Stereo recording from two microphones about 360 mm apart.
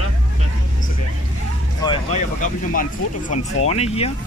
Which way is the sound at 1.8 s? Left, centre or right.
Centre.